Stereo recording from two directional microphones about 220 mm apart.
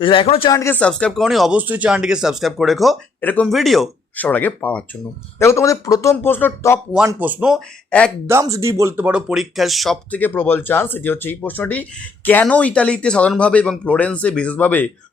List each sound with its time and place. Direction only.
0.0 s a man's voice: 25° left (ahead or behind)
0.5 s speech: 10° left (ahead or behind)
6.9 s speech: 10° right (ahead or behind)
8.3 s speech: 15° right (ahead or behind); by 14.8 s 5° left (ahead or behind)